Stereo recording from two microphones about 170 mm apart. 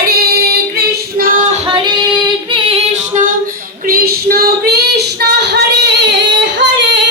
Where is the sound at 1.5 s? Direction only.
30° right (ahead or behind).